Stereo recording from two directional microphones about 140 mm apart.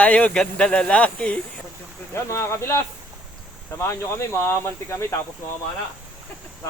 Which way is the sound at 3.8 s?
20° left (ahead or behind).